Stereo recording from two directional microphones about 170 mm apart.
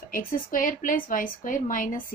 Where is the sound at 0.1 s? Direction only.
55° left (ahead or behind).